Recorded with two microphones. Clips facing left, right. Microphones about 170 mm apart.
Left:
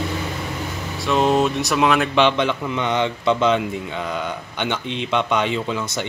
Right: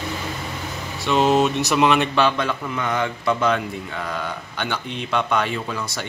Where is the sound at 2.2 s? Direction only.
20° left (ahead or behind).